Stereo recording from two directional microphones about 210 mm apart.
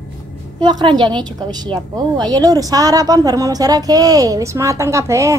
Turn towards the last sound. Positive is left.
turn(degrees=-15)  # may be behind; listen again after turning